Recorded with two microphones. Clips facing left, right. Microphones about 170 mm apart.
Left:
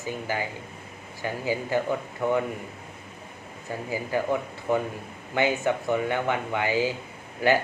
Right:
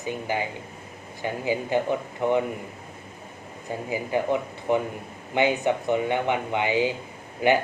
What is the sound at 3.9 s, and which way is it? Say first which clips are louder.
Speech: right 2 dB; 20° right (ahead or behind).